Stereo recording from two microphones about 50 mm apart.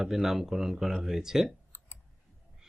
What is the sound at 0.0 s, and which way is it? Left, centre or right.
Speech, centre.